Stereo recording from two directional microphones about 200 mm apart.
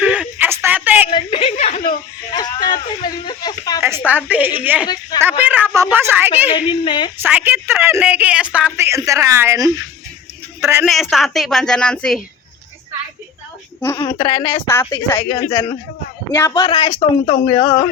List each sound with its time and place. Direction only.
0.0 s a sound: 5° right (ahead or behind)
1.1 s a sound: 25° left (ahead or behind)
2.3 s a sound: 20° left (ahead or behind)
3.8 s a woman's voice: 10° right (ahead or behind)
6.7 s speech: 25° left (ahead or behind)
7.2 s a woman's voice: 10° right (ahead or behind)
11.1 s a woman's voice: centre (ahead or behind)
14.2 s a woman's voice: 15° left (ahead or behind)
16.3 s a woman's voice: 15° left (ahead or behind)
16.7 s speech: 30° left (ahead or behind)
17.5 s a woman's voice: 20° left (ahead or behind)